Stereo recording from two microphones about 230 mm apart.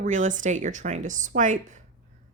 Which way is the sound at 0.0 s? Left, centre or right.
Right.